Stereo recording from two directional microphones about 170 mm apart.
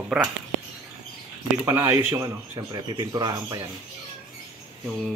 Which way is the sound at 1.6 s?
15° right (ahead or behind).